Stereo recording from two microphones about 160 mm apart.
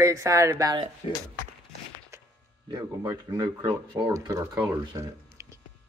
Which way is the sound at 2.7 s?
20° right (ahead or behind).